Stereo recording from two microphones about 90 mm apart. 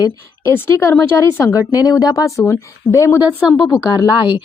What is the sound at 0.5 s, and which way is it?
A woman's voice, 30° left (ahead or behind).